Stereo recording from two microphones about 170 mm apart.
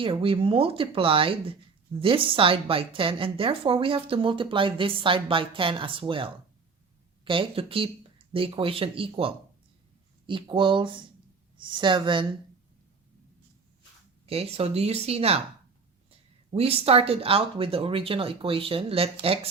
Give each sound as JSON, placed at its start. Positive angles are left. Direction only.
{"t": 0.0, "sound": "a woman's voice", "side_deg": -30}
{"t": 14.3, "sound": "a woman's voice", "side_deg": -35}
{"t": 16.5, "sound": "a woman's voice", "side_deg": -35}